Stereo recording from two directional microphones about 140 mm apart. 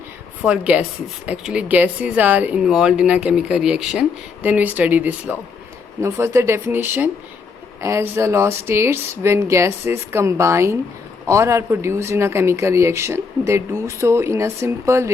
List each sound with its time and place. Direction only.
0.4 s speech: 10° right (ahead or behind)